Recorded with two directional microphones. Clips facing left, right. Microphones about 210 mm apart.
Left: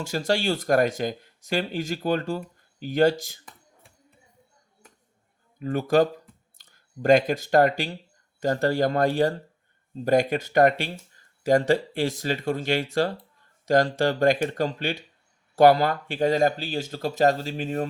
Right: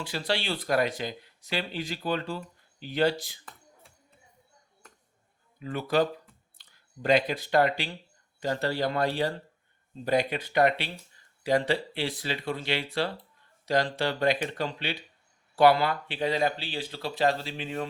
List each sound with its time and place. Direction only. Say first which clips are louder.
0.0 s speech: left 6 dB; 45° left (ahead or behind)
5.5 s speech: left 5 dB; 45° left (ahead or behind)